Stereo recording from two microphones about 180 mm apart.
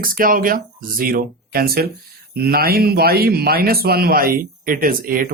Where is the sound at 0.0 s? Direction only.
50° right (ahead or behind).